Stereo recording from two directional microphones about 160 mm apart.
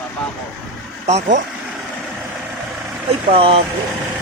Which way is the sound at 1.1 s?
45° right (ahead or behind).